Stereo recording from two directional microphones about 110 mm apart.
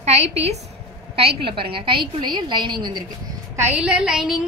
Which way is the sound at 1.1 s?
55° right (ahead or behind).